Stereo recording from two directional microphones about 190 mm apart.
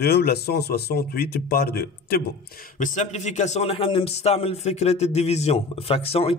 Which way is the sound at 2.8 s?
40° left (ahead or behind).